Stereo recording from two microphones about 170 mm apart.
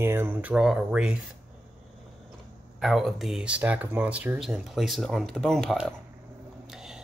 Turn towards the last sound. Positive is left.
turn(degrees=-5)  # may be behind; listen again after turning